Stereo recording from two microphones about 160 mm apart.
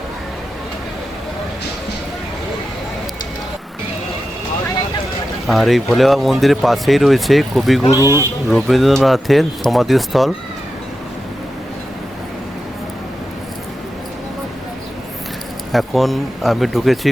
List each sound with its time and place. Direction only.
5.5 s speech: centre (ahead or behind)
7.9 s speech: 20° left (ahead or behind)
8.4 s speech: centre (ahead or behind)
15.7 s speech: centre (ahead or behind)